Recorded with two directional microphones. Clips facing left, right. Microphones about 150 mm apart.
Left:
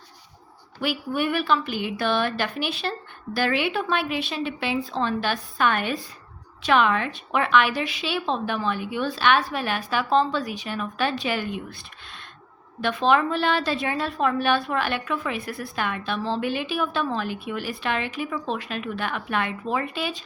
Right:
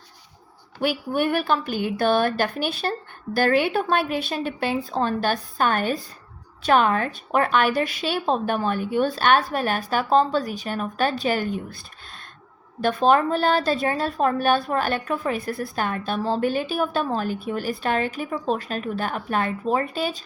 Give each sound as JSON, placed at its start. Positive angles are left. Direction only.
{"t": 0.8, "sound": "a woman's voice", "side_deg": -50}
{"t": 12.8, "sound": "a woman's voice", "side_deg": -45}